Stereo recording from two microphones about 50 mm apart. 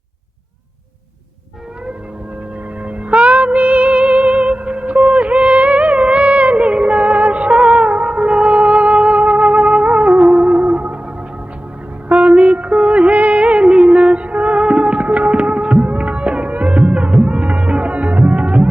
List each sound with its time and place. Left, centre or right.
2.8 s music: right
12.0 s music of bollywood: right